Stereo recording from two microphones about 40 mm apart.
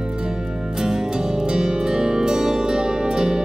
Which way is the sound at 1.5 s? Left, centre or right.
Centre.